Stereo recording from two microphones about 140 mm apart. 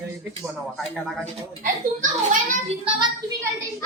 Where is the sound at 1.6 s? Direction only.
65° right (ahead or behind).